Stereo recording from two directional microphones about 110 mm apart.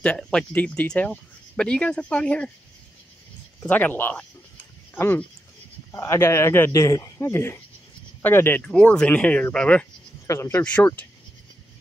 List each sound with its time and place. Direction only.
0.0 s speech: 10° left (ahead or behind)
3.6 s speech: 15° left (ahead or behind)
8.6 s speech: 10° left (ahead or behind)
10.2 s speech: 25° left (ahead or behind)
10.6 s speech: 10° left (ahead or behind)